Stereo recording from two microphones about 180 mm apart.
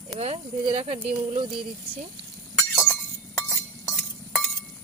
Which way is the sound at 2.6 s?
Centre (ahead or behind).